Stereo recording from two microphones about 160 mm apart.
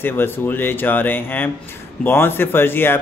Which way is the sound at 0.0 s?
15° left (ahead or behind).